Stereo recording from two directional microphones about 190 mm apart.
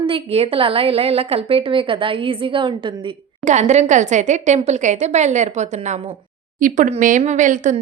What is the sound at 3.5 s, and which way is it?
A woman's voice, 35° right (ahead or behind).